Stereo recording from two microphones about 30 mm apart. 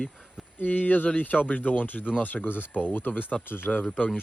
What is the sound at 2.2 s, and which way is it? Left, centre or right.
Speech, left.